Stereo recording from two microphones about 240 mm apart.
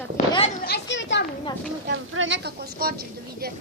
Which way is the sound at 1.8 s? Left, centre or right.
Right.